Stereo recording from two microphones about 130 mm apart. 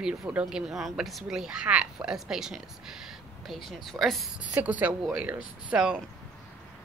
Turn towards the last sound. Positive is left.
turn(degrees=-10)  # may be behind; listen again after turning